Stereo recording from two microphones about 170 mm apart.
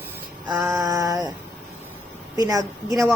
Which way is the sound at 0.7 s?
20° right (ahead or behind).